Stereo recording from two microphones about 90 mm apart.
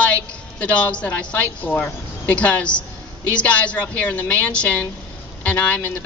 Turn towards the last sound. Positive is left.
turn(degrees=15)  # may be behind; listen again after turning